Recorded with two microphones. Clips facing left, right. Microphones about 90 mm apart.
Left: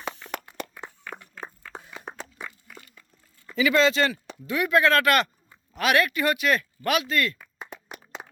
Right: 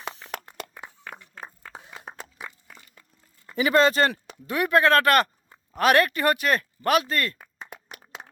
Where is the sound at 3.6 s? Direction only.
45° right (ahead or behind).